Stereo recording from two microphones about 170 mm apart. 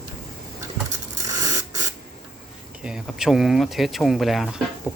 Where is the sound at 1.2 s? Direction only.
20° right (ahead or behind).